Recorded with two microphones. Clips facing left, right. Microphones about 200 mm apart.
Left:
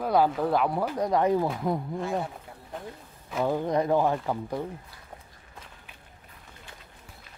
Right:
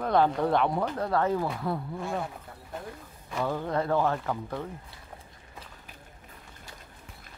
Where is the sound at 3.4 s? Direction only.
15° left (ahead or behind).